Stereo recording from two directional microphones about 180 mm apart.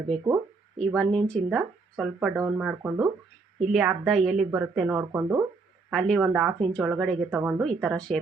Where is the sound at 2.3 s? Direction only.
15° right (ahead or behind).